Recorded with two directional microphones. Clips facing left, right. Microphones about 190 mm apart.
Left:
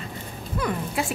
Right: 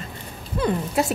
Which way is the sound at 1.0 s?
40° right (ahead or behind).